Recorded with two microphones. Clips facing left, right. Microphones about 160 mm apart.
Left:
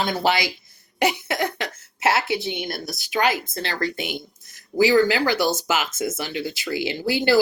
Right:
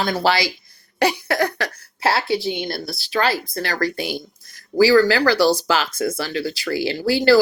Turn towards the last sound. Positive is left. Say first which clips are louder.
# right 5 dB
turn(degrees=20)  # may be behind; listen again after turning